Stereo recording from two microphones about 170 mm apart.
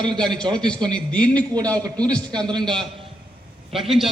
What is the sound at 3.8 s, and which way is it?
Speech, centre (ahead or behind).